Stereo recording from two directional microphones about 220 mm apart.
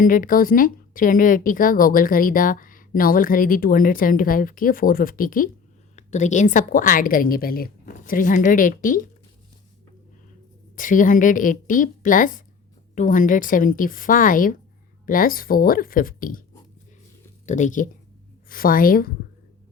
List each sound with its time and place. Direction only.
0.0 s speech: 40° left (ahead or behind)
10.8 s speech: 35° left (ahead or behind)
17.4 s speech: 35° left (ahead or behind)